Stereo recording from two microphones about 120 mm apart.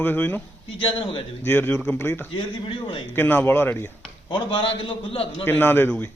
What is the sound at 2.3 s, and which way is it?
Speech, 45° left (ahead or behind).